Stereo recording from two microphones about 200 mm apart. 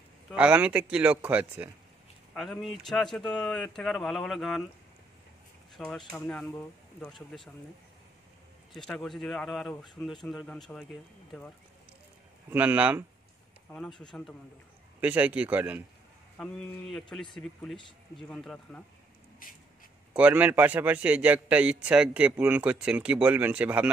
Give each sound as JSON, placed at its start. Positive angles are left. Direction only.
{"t": 0.3, "sound": "speech", "side_deg": -5}
{"t": 5.9, "sound": "speech", "side_deg": 5}
{"t": 8.7, "sound": "speech", "side_deg": 0}
{"t": 12.4, "sound": "speech", "side_deg": -10}
{"t": 13.7, "sound": "speech", "side_deg": 5}
{"t": 15.0, "sound": "speech", "side_deg": -5}
{"t": 16.3, "sound": "speech", "side_deg": 5}
{"t": 19.4, "sound": "a sound", "side_deg": 45}
{"t": 20.2, "sound": "speech", "side_deg": -5}